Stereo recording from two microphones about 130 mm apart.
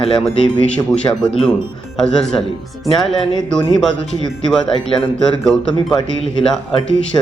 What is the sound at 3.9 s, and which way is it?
Speech, 70° right (ahead or behind).